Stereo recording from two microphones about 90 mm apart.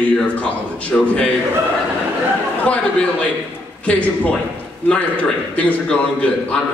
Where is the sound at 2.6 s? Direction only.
15° left (ahead or behind).